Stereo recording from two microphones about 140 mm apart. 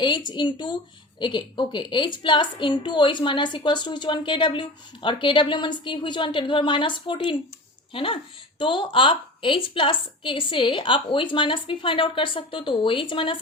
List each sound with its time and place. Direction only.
0.0 s a woman's voice: 30° left (ahead or behind)